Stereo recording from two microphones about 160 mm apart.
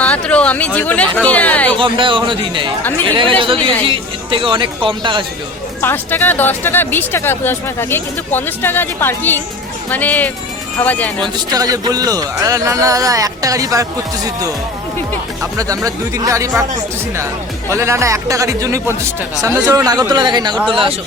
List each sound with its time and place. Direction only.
0.0 s speech: 10° left (ahead or behind)
1.8 s speech: 30° right (ahead or behind)
5.8 s speech: 15° left (ahead or behind)
11.2 s speech: 25° right (ahead or behind)
15.5 s speech: 20° right (ahead or behind)
17.7 s speech: 15° right (ahead or behind)